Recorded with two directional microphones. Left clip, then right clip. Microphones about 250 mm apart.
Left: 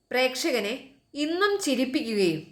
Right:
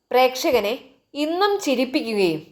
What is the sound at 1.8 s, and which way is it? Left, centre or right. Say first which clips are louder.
Speech: right 5 dB; right.